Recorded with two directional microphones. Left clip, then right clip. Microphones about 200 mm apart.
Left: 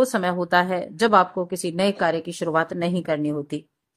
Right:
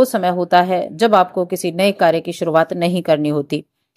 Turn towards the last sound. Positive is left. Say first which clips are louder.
# right 8 dB
turn(degrees=-25)  # may be behind; listen again after turning